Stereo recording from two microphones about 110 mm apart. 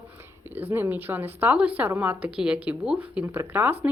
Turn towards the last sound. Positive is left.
turn(degrees=-15)  # may be behind; listen again after turning